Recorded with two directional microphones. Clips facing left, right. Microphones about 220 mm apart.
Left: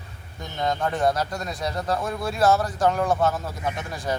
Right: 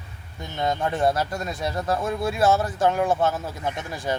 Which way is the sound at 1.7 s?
5° right (ahead or behind).